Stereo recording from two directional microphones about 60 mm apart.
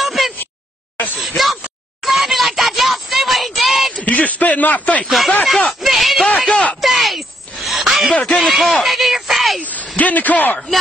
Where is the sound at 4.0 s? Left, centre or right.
Left.